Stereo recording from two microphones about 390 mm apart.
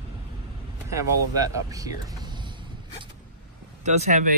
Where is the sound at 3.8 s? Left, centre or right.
Centre.